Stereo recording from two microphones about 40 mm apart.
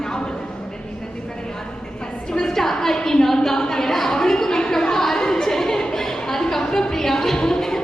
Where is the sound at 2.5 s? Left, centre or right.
Centre.